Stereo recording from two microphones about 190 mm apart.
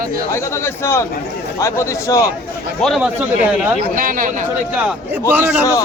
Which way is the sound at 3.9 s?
45° right (ahead or behind).